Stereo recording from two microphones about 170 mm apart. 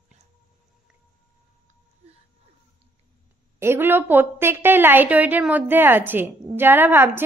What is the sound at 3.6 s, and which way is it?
A woman's voice, 15° right (ahead or behind).